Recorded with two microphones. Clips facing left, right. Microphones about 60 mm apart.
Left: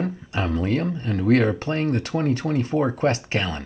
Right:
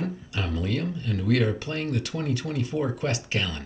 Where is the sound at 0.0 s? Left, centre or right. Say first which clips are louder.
Left 5 dB; left.